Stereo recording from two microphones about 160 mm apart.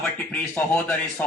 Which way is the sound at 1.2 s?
10° left (ahead or behind).